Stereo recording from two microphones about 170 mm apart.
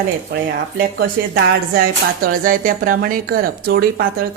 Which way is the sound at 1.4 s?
60° right (ahead or behind).